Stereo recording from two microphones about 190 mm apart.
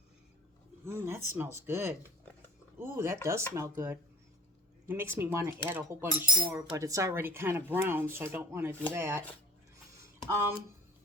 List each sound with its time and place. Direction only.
0.9 s speech: 15° right (ahead or behind)
10.2 s speech: 15° right (ahead or behind)